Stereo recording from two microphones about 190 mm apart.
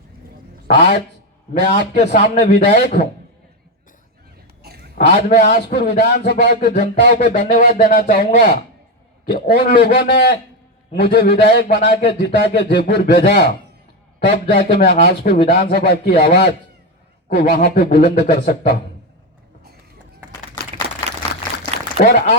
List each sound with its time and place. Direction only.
0.7 s a man's voice: 55° left (ahead or behind)
4.6 s a sound: 55° right (ahead or behind)
4.9 s a man's voice: 45° left (ahead or behind)
22.0 s a man's voice: 50° left (ahead or behind)